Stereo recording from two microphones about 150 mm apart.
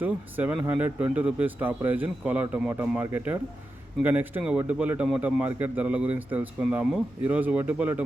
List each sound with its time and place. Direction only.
0.0 s a man's voice: 10° right (ahead or behind)